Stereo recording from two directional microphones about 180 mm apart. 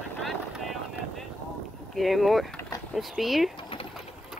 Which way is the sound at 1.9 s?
Centre (ahead or behind).